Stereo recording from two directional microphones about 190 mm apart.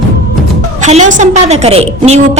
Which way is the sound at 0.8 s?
40° right (ahead or behind).